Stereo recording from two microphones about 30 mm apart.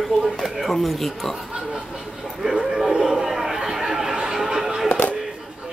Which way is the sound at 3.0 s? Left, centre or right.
Centre.